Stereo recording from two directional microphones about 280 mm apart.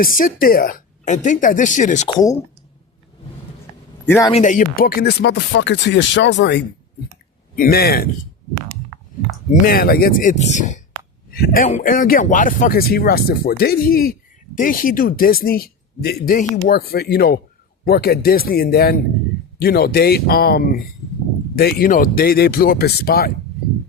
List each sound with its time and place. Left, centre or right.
0.0 s a woman's voice: left
2.1 s speech: centre
4.0 s a man's voice: centre
4.3 s speech: left
9.5 s a woman's voice: left